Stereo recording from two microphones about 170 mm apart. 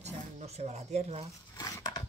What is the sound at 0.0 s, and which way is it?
Speech, 40° right (ahead or behind).